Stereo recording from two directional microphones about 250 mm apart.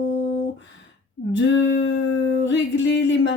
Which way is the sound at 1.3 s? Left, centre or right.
Left.